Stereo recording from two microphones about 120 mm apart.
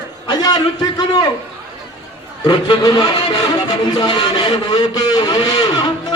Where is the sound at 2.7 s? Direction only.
40° left (ahead or behind).